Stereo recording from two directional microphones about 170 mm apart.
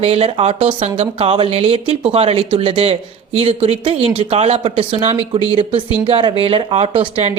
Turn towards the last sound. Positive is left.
turn(degrees=-30)  # may be behind; listen again after turning